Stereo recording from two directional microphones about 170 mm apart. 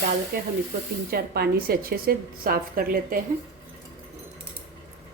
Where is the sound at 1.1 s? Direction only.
65° right (ahead or behind).